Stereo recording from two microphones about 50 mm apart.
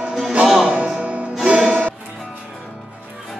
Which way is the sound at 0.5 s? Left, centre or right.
Centre.